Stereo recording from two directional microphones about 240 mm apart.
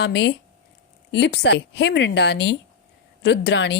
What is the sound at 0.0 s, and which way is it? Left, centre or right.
Speech, left.